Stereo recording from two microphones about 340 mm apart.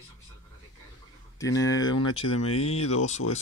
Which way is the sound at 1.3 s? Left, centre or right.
Centre.